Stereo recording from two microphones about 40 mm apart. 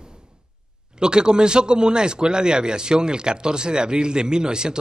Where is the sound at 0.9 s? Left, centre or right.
Right.